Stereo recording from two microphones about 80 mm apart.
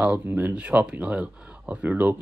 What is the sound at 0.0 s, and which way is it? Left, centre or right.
Speech, centre.